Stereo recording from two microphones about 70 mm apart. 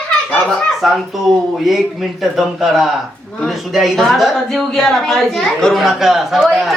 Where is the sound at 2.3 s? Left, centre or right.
Centre.